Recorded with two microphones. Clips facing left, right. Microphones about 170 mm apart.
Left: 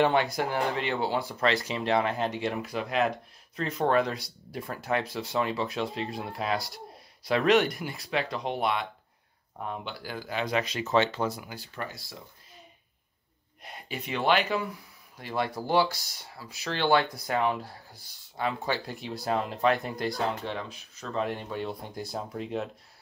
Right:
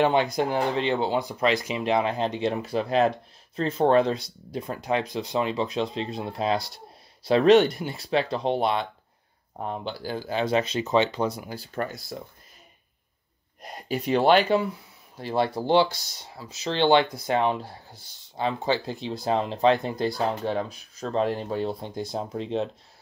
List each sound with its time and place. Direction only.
0.0 s speech: 20° right (ahead or behind)
11.4 s speech: 35° right (ahead or behind)
13.6 s speech: 40° right (ahead or behind); by 20.1 s 25° right (ahead or behind)
20.4 s speech: 40° right (ahead or behind)
21.9 s speech: 20° right (ahead or behind)